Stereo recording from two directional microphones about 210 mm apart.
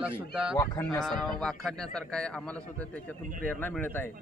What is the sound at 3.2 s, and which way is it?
Speech, 40° right (ahead or behind).